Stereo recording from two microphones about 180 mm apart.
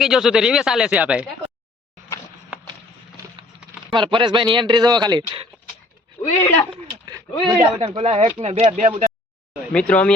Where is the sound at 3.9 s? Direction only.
25° right (ahead or behind).